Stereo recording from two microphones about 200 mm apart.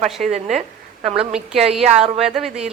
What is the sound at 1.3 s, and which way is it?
Speech, 5° right (ahead or behind).